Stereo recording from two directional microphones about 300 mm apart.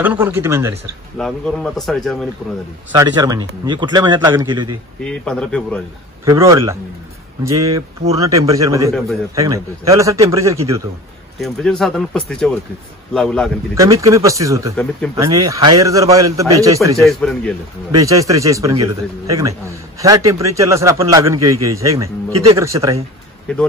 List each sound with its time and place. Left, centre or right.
0.0 s a man's voice: centre
2.9 s a man's voice: centre
5.0 s speech: centre
6.3 s a man's voice: centre
11.4 s speech: centre
13.7 s a man's voice: centre
17.0 s speech: centre
18.0 s a man's voice: centre
21.4 s a man's voice: right
21.6 s a man's voice: centre